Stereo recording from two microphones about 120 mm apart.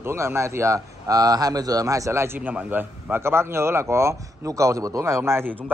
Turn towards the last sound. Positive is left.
turn(degrees=-20)  # may be behind; listen again after turning